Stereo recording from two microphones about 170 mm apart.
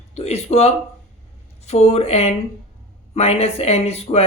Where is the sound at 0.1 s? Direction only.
40° left (ahead or behind).